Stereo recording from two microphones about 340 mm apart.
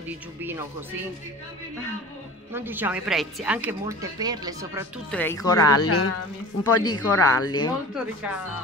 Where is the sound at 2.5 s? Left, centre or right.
Centre.